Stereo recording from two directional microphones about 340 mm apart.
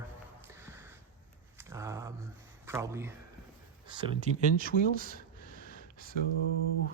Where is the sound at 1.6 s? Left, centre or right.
Centre; by 5.2 s right.